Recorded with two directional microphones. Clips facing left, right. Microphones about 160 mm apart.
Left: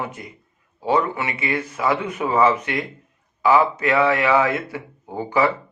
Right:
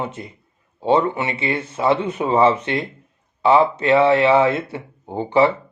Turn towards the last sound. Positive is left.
turn(degrees=-25)  # may be behind; listen again after turning